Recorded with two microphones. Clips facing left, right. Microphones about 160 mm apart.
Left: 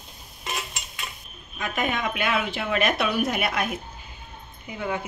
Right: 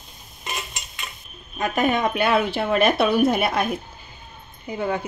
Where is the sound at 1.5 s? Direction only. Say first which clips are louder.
Right 6 dB; 40° right (ahead or behind).